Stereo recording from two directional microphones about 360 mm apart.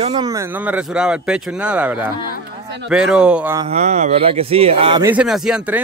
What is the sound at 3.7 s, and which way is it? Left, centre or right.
Speech, centre.